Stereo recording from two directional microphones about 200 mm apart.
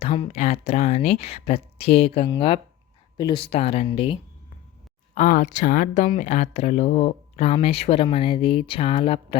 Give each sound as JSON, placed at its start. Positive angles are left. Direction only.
{"t": 0.0, "sound": "speech", "side_deg": 30}
{"t": 5.1, "sound": "speech", "side_deg": 40}